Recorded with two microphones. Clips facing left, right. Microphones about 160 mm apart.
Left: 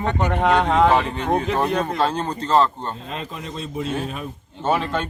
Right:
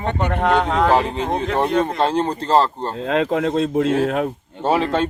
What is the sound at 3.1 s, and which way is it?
Speech, 90° right.